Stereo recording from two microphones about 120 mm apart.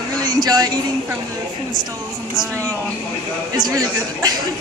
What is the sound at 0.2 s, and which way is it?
Speech, 35° right (ahead or behind).